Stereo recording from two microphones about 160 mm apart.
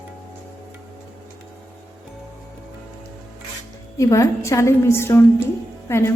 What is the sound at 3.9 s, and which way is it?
A woman's voice, 20° left (ahead or behind).